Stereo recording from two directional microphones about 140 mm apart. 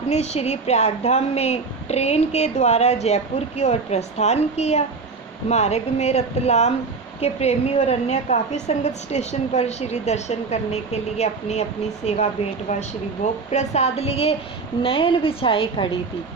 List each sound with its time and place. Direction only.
0.1 s a woman's voice: 50° left (ahead or behind)